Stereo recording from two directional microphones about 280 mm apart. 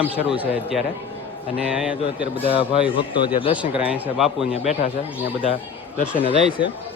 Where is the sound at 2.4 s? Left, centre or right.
Centre.